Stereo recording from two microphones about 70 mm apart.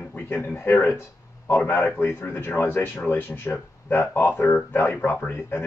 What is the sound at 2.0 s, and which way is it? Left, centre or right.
Speech, left.